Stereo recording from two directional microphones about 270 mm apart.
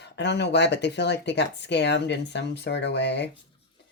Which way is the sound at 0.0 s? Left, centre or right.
Left.